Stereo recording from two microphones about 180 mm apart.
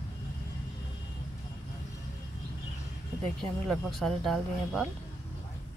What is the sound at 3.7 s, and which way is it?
Speech, centre (ahead or behind).